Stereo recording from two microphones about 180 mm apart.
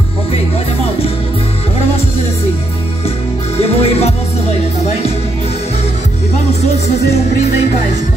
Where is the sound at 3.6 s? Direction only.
35° left (ahead or behind).